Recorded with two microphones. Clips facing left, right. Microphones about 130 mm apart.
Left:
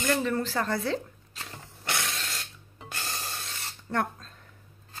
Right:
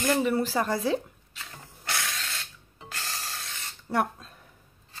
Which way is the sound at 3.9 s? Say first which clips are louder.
Right 2 dB; 10° right (ahead or behind).